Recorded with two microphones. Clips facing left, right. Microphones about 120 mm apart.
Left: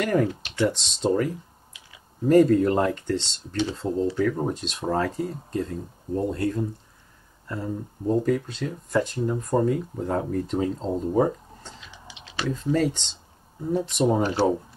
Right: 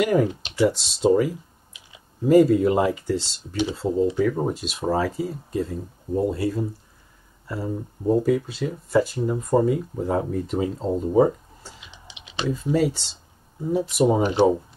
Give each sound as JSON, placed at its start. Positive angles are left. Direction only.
{"t": 0.0, "sound": "speech", "side_deg": -10}
{"t": 11.8, "sound": "computer keyboard", "side_deg": -15}
{"t": 13.7, "sound": "speech", "side_deg": -5}